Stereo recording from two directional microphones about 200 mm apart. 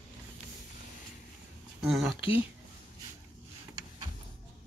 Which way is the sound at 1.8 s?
Centre (ahead or behind).